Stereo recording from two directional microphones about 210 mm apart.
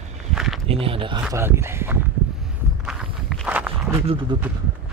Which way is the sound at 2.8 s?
Centre (ahead or behind).